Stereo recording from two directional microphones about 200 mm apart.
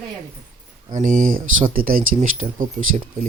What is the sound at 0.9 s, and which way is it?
Speech, 40° right (ahead or behind).